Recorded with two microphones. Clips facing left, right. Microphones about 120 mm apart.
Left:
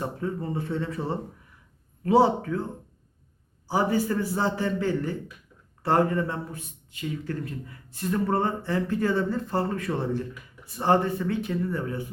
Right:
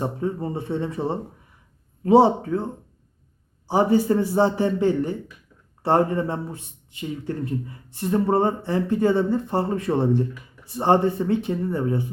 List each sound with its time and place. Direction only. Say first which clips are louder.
0.0 s speech: right 4 dB; 20° right (ahead or behind)
3.7 s speech: right 6 dB; 25° right (ahead or behind)